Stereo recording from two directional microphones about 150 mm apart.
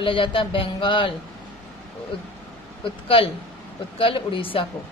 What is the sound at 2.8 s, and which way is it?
A woman's voice, 35° left (ahead or behind).